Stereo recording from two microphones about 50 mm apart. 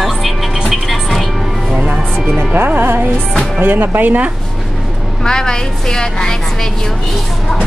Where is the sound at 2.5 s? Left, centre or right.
Right.